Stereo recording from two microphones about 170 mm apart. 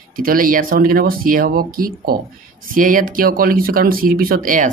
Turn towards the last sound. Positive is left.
turn(degrees=-55)  # may be behind; listen again after turning